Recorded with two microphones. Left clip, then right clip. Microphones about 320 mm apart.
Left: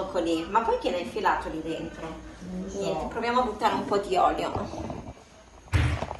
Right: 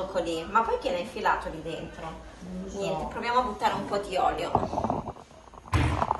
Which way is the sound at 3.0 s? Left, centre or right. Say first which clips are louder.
Even; centre.